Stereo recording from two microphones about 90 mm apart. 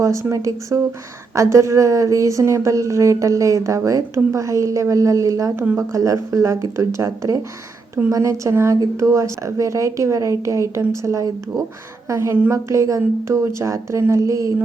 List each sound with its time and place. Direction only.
0.0 s speech: 35° right (ahead or behind)